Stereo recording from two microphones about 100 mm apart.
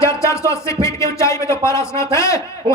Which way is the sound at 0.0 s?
30° left (ahead or behind).